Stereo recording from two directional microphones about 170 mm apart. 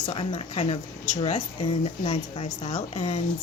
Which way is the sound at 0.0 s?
30° left (ahead or behind).